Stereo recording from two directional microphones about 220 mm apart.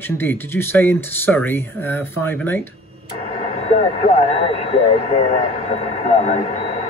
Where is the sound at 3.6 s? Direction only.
30° left (ahead or behind).